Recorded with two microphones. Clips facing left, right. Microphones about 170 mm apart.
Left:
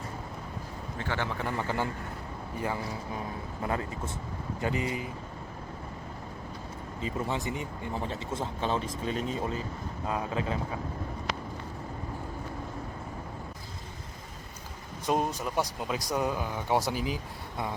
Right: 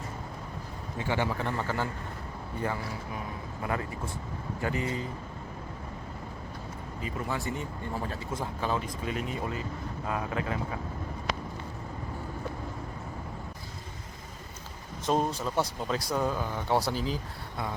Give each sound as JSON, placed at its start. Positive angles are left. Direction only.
{"t": 0.9, "sound": "a man's voice", "side_deg": -15}
{"t": 1.4, "sound": "speech", "side_deg": 10}
{"t": 3.6, "sound": "speech", "side_deg": 25}
{"t": 7.0, "sound": "speech", "side_deg": 20}
{"t": 15.4, "sound": "speech", "side_deg": 15}